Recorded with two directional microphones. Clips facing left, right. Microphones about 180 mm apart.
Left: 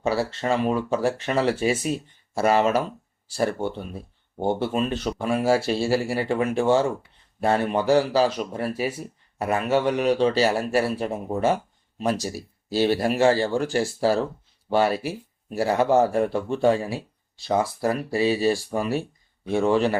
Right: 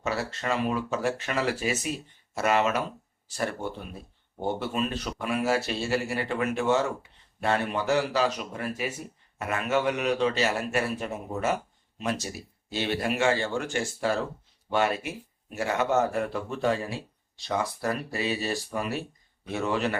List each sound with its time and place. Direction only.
0.0 s speech: 30° left (ahead or behind)